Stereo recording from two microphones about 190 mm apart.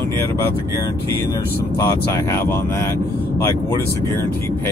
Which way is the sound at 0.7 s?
15° left (ahead or behind).